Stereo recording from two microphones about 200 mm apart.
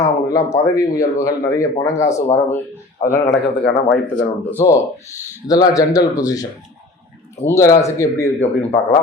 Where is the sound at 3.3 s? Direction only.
55° left (ahead or behind).